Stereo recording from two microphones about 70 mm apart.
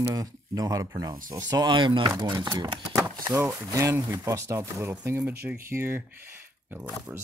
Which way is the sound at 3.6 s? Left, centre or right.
Right.